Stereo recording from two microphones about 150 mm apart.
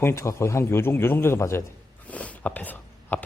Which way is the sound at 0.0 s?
20° left (ahead or behind).